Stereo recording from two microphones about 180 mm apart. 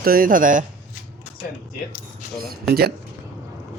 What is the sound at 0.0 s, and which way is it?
Speech, 55° right (ahead or behind).